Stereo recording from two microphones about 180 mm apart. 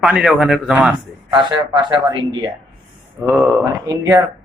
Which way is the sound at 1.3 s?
25° right (ahead or behind).